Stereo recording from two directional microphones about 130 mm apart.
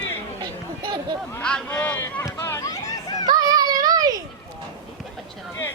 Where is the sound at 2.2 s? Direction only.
20° left (ahead or behind).